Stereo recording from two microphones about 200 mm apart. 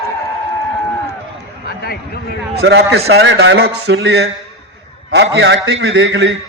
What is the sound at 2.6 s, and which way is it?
A man's voice, 55° right (ahead or behind).